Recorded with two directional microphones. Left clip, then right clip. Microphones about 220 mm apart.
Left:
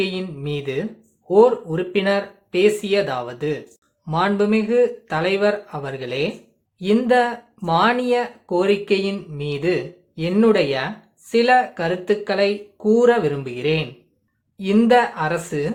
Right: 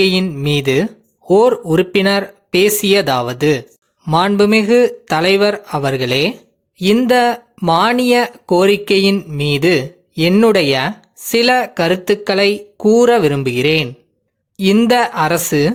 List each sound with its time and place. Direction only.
0.0 s speech: 45° right (ahead or behind)